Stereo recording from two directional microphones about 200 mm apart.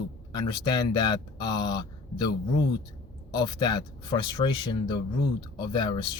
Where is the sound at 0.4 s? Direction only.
20° left (ahead or behind).